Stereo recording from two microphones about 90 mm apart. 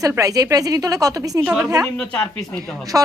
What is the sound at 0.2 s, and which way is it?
A woman's voice, 40° right (ahead or behind).